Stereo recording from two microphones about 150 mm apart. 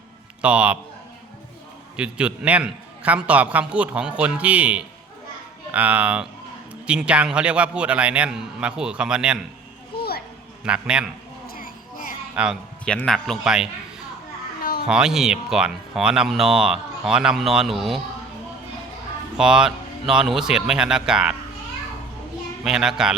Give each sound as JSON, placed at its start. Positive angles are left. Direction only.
{"t": 0.4, "sound": "a man's voice", "side_deg": -10}
{"t": 2.0, "sound": "a man's voice", "side_deg": -5}
{"t": 10.0, "sound": "children playing", "side_deg": 90}
{"t": 10.6, "sound": "a man's voice", "side_deg": -5}
{"t": 11.4, "sound": "a sound", "side_deg": 70}
{"t": 12.3, "sound": "speech", "side_deg": -5}
{"t": 12.8, "sound": "speech", "side_deg": 5}
{"t": 14.6, "sound": "cat", "side_deg": 75}
{"t": 14.8, "sound": "speech", "side_deg": -5}
{"t": 19.4, "sound": "speech", "side_deg": -5}
{"t": 22.6, "sound": "speech", "side_deg": -5}